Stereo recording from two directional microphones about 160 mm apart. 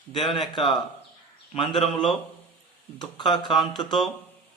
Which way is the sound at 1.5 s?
35° left (ahead or behind).